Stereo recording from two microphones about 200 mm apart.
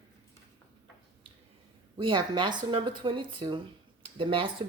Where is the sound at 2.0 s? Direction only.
25° right (ahead or behind).